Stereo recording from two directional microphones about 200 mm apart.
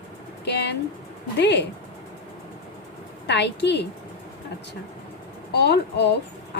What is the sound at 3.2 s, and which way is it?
Speech, 60° left (ahead or behind).